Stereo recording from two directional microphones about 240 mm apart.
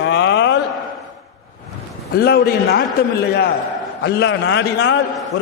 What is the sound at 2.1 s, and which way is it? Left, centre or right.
Speech, left.